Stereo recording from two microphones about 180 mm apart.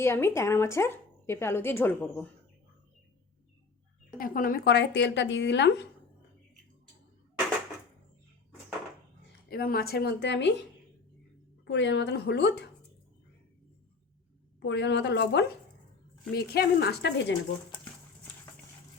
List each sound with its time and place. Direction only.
0.0 s speech: 15° left (ahead or behind)
4.2 s a woman's voice: 50° left (ahead or behind); by 5.7 s 75° left (ahead or behind)
9.5 s a woman's voice: 60° left (ahead or behind); by 10.5 s 80° left
11.6 s a woman's voice: 80° left
14.6 s a woman's voice: 80° left
16.3 s a woman's voice: 60° left (ahead or behind)